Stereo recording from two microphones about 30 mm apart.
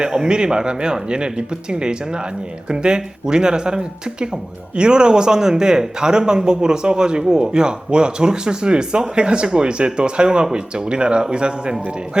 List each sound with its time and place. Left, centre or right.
0.0 s speech: right